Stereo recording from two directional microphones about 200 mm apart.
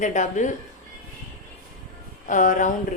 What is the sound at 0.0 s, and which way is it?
Speech, 40° left (ahead or behind).